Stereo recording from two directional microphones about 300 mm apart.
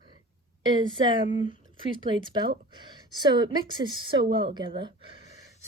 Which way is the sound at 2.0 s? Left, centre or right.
Centre.